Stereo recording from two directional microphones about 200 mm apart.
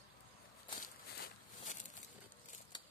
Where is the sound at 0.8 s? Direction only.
45° left (ahead or behind).